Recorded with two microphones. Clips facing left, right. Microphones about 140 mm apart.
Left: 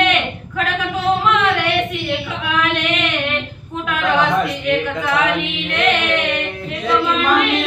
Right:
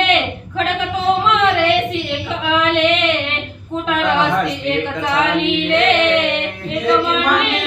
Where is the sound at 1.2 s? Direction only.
25° right (ahead or behind).